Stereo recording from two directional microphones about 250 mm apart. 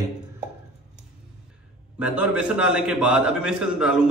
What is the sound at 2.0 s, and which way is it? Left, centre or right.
A man's voice, centre.